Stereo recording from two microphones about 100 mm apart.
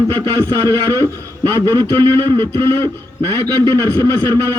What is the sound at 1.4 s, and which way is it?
A man's voice, 25° left (ahead or behind).